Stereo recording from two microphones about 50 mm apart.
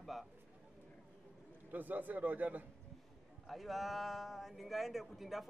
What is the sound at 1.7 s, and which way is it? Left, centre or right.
Speech, right.